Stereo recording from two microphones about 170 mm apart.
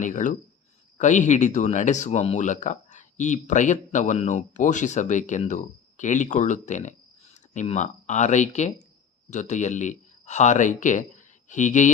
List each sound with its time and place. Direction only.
0.0 s speech: 50° left (ahead or behind)